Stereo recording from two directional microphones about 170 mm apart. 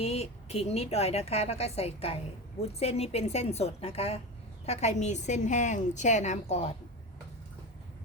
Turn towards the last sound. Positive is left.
turn(degrees=40)  # may be behind; listen again after turning